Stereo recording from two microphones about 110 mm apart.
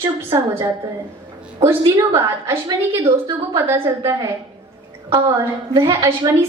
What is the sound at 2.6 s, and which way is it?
Speech, 40° right (ahead or behind).